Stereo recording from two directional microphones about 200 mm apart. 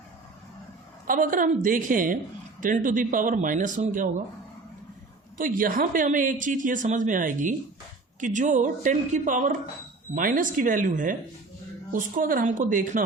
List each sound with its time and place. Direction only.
1.0 s a woman's voice: 45° right (ahead or behind)
5.4 s speech: 45° right (ahead or behind)